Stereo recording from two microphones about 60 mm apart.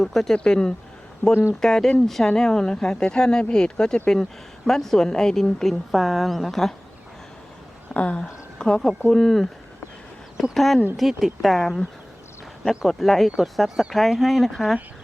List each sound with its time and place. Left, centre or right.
0.0 s speech: centre
0.3 s speech: centre
1.3 s speech: left
1.6 s speech: centre
7.9 s speech: left; by 9.5 s centre
10.5 s speech: centre